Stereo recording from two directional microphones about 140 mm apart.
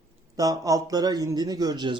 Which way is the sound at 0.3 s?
25° right (ahead or behind).